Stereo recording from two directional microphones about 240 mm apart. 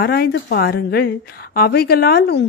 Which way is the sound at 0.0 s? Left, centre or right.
Left.